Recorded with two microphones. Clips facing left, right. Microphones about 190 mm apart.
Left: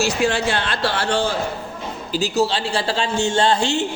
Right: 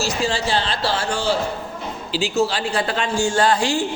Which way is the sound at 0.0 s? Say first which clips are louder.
Left 3 dB; 60° left (ahead or behind).